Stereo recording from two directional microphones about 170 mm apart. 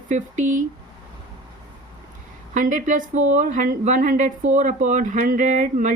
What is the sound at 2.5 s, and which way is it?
A woman's voice, 45° right (ahead or behind).